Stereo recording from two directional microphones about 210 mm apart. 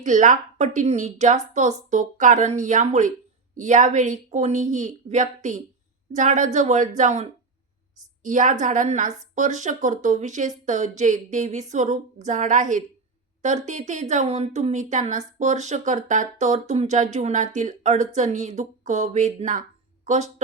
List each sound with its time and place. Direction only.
0.0 s speech: 35° right (ahead or behind)